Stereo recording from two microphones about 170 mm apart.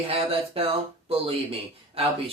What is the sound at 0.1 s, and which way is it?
Speech, 35° right (ahead or behind).